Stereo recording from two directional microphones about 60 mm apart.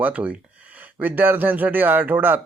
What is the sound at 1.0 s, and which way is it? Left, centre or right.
A man's voice, right.